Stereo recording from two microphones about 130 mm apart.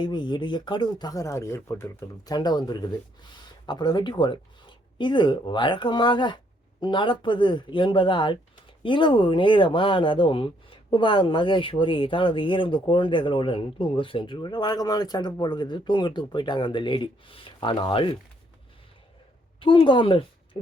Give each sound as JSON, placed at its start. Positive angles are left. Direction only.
{"t": 0.0, "sound": "speech", "side_deg": 35}
{"t": 19.5, "sound": "speech", "side_deg": 40}